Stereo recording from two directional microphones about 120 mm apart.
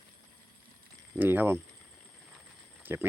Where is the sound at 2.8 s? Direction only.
15° right (ahead or behind).